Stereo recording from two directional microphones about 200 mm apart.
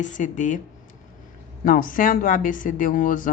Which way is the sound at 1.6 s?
45° left (ahead or behind).